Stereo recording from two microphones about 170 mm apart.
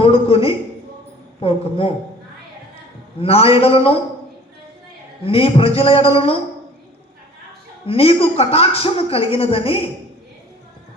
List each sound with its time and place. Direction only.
0.0 s a sound: 35° left (ahead or behind)
1.4 s speech: 35° left (ahead or behind)
3.2 s speech: 35° left (ahead or behind)
5.2 s speech: 35° left (ahead or behind)
7.9 s speech: 35° left (ahead or behind)